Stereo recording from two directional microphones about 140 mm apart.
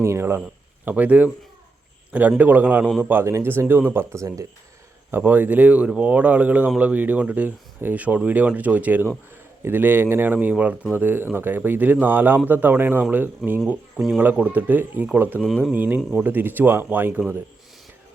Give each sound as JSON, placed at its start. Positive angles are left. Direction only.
{"t": 0.0, "sound": "a man's voice", "side_deg": -20}
{"t": 2.4, "sound": "speech", "side_deg": -10}
{"t": 15.4, "sound": "speech", "side_deg": 5}
{"t": 15.7, "sound": "speech", "side_deg": -15}